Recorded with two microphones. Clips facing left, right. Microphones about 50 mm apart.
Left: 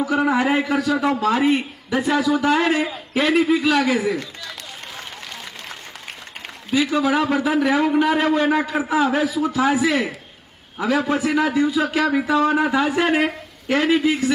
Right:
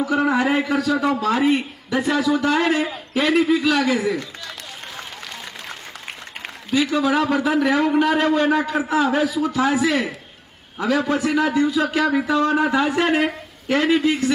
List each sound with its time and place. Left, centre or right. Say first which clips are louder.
0.0 s a man's voice: even; centre
6.7 s a man's voice: even; centre